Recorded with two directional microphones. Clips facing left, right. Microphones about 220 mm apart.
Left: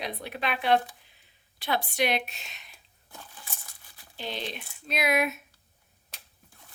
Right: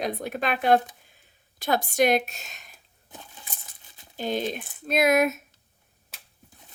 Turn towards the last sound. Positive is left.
turn(degrees=-40)  # may be behind; listen again after turning